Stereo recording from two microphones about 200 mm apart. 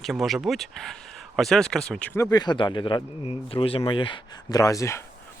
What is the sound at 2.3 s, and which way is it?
Speech, 20° left (ahead or behind).